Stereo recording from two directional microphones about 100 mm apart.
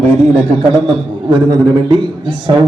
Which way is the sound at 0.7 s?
50° right (ahead or behind).